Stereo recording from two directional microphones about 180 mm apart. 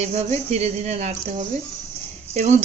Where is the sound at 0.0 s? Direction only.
40° right (ahead or behind).